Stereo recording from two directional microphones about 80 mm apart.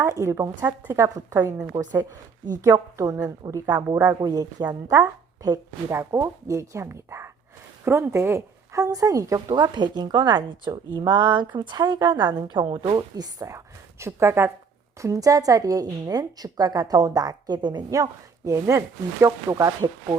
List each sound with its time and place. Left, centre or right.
0.0 s a woman's voice: right
1.6 s speech: right
2.0 s a woman's voice: right
9.6 s a woman's voice: right
14.0 s a woman's voice: right
15.0 s a woman's voice: right
17.9 s a woman's voice: right